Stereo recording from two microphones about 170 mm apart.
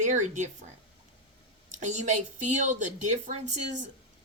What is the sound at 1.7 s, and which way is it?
Speech, 45° right (ahead or behind).